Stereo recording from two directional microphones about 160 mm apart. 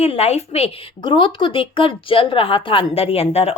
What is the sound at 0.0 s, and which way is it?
A woman's voice, 40° left (ahead or behind).